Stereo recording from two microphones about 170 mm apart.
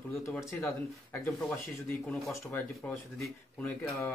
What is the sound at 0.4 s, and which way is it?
Speech, 20° left (ahead or behind).